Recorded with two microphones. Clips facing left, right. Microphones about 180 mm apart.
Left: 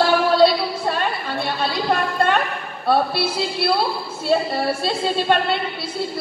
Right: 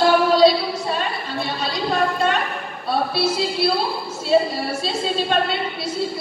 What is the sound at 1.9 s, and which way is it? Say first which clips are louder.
A woman's voice: even; 55° left (ahead or behind).